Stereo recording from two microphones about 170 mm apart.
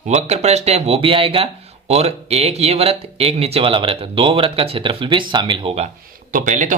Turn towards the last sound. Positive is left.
turn(degrees=-45)  # may be behind; listen again after turning